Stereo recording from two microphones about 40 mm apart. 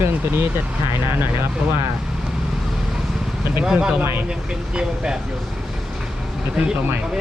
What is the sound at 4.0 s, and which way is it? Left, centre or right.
Speech, right.